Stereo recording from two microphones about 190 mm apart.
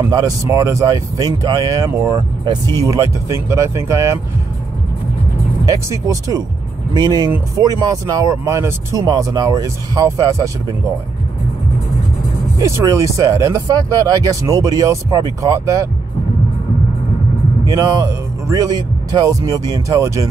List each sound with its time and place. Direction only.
0.0 s speech: 20° right (ahead or behind)
5.7 s speech: 20° right (ahead or behind)
7.2 s speech: 10° right (ahead or behind)
12.5 s speech: 15° right (ahead or behind)
17.6 s speech: 20° right (ahead or behind)